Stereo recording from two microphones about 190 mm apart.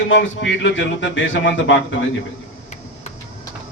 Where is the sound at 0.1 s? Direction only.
75° left (ahead or behind).